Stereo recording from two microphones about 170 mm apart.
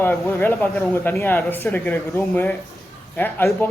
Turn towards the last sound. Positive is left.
turn(degrees=10)  # may be behind; listen again after turning